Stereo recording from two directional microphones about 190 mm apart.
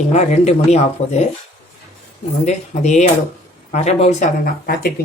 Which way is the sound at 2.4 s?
40° left (ahead or behind).